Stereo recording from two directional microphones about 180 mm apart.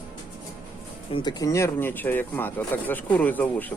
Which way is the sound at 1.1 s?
25° left (ahead or behind).